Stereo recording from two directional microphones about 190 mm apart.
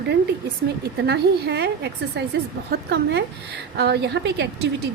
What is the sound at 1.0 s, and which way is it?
A woman's voice, 60° right (ahead or behind).